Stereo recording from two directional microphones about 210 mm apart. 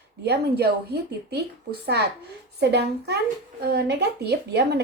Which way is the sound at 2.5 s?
50° right (ahead or behind).